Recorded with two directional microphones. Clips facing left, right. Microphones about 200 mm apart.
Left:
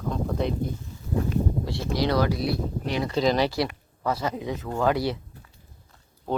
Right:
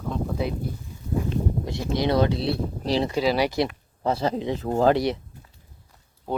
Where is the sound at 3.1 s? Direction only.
10° right (ahead or behind).